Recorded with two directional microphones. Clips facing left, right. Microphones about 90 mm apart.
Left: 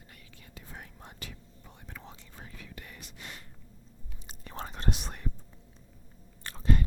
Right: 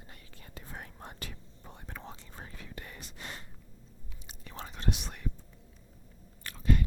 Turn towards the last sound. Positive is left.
turn(degrees=30)  # may be behind; listen again after turning